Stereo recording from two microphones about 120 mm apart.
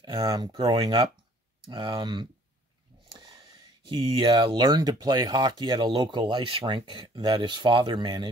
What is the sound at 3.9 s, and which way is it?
Speech, 45° right (ahead or behind).